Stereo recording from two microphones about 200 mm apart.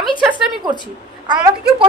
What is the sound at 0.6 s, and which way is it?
Speech, 20° right (ahead or behind).